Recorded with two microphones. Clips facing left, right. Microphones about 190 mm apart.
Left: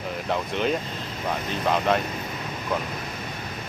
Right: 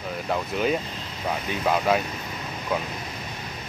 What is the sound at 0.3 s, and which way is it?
Speech, 5° right (ahead or behind).